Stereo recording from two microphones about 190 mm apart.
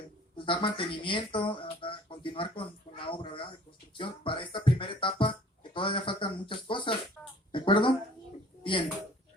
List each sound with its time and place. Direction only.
0.3 s speech: 25° left (ahead or behind)
7.2 s a sound: 5° left (ahead or behind)
7.5 s speech: 25° left (ahead or behind)